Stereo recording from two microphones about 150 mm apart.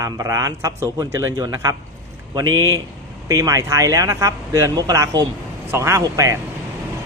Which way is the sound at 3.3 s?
25° right (ahead or behind).